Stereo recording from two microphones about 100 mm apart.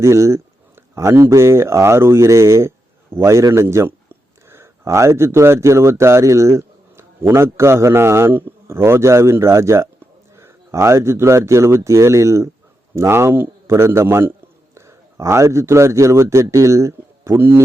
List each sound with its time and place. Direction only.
0.0 s a man's voice: 30° right (ahead or behind)